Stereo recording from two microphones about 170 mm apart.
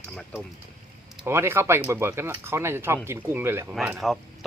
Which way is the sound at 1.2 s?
15° right (ahead or behind).